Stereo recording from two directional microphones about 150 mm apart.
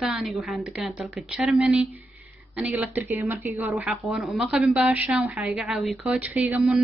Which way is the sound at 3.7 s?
5° right (ahead or behind).